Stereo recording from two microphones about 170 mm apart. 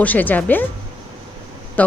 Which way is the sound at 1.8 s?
10° left (ahead or behind).